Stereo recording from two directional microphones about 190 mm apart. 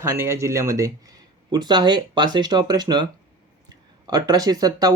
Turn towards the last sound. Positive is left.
turn(degrees=-20)  # may be behind; listen again after turning